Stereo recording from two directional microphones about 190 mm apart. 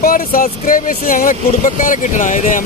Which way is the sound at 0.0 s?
50° left (ahead or behind).